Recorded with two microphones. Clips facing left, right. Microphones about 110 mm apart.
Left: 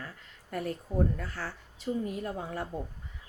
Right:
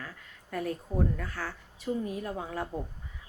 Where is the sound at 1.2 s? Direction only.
30° left (ahead or behind).